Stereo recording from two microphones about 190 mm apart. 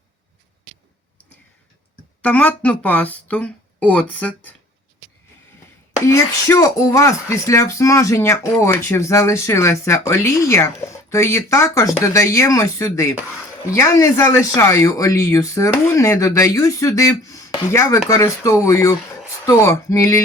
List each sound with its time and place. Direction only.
2.2 s speech: 10° left (ahead or behind)
6.1 s speech: 15° left (ahead or behind)